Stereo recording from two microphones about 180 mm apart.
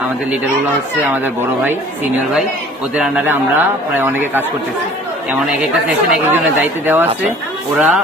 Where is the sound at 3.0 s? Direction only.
10° right (ahead or behind).